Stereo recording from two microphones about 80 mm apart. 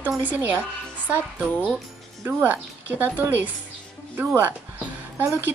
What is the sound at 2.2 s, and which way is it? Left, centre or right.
A woman's voice, right.